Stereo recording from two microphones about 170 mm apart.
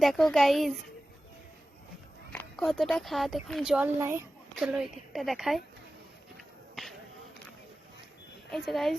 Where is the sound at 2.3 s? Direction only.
10° left (ahead or behind); by 4.2 s 15° right (ahead or behind).